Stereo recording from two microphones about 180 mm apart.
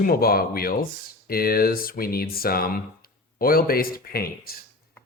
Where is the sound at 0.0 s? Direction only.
55° left (ahead or behind).